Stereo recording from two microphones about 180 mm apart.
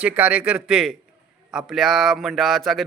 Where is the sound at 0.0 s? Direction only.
10° right (ahead or behind).